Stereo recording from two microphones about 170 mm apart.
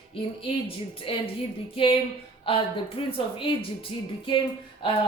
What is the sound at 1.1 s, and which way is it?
Speech, 30° left (ahead or behind).